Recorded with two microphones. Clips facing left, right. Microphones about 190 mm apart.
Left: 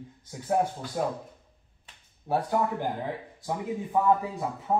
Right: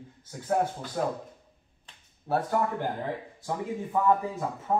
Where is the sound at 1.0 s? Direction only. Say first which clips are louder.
Even; 10° left (ahead or behind).